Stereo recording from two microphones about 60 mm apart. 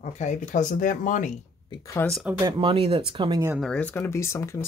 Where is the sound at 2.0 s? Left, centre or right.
Left.